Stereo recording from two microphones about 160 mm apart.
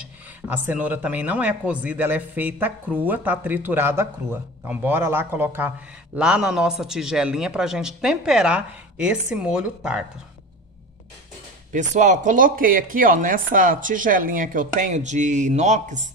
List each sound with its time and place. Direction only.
0.5 s a man's voice: 10° right (ahead or behind)
11.7 s speech: 50° right (ahead or behind)